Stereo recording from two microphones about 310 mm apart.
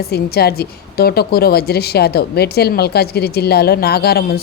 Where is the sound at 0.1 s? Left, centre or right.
Left.